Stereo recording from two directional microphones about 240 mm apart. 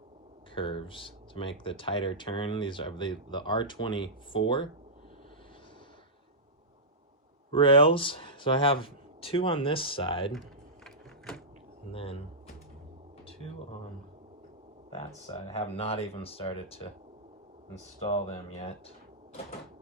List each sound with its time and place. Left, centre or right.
0.5 s speech: left
7.5 s speech: left
11.9 s speech: left
14.8 s speech: left
18.0 s speech: left